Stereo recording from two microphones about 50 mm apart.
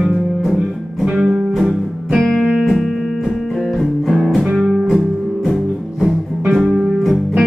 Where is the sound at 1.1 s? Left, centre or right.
Centre.